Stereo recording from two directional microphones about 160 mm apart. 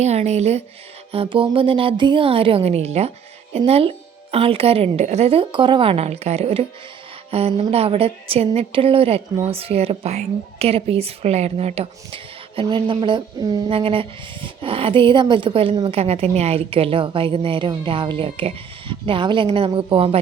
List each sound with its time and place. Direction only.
0.0 s a woman's voice: 45° right (ahead or behind)